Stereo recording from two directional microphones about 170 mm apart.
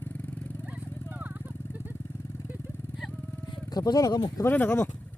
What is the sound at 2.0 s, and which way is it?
Vehicle, 15° left (ahead or behind).